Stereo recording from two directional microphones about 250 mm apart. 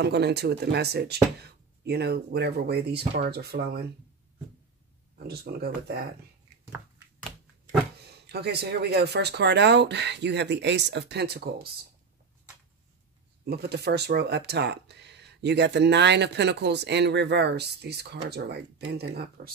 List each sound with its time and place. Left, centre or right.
0.0 s speech: right
5.1 s speech: right
8.3 s speech: right
13.5 s speech: right